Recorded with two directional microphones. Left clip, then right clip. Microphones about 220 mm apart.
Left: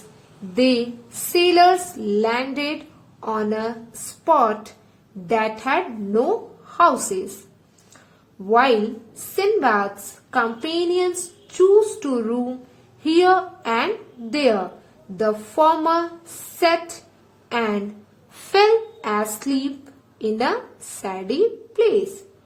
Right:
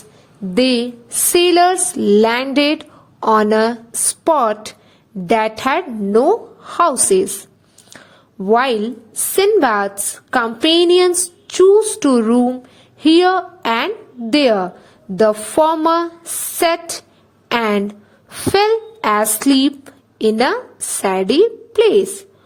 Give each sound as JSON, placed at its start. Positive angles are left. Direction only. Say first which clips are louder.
{"t": 0.5, "sound": "speech", "louder": "right 4 dB", "side_deg": -40}
{"t": 8.4, "sound": "a woman's voice", "louder": "right 2 dB", "side_deg": -40}